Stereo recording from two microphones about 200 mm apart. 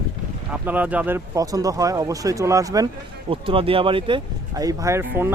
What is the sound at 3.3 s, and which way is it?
Speech, 25° right (ahead or behind).